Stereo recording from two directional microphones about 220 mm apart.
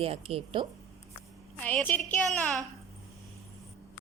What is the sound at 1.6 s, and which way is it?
Speech, 5° left (ahead or behind).